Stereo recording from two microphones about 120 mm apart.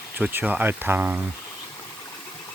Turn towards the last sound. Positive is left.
turn(degrees=-15)  # may be behind; listen again after turning